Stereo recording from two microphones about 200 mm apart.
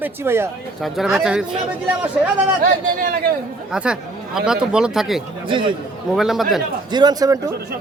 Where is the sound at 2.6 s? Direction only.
45° right (ahead or behind).